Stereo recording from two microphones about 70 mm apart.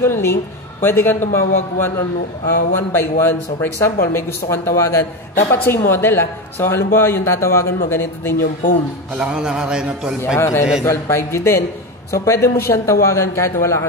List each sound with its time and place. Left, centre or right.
0.0 s speech: left
9.1 s a man's voice: centre
10.3 s speech: left